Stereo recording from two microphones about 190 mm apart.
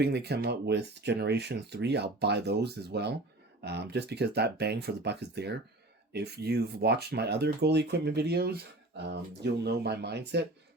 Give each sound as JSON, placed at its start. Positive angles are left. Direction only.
{"t": 0.0, "sound": "speech", "side_deg": -60}